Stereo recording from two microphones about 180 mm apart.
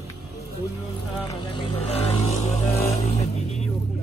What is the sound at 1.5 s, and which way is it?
Vehicle, 30° left (ahead or behind).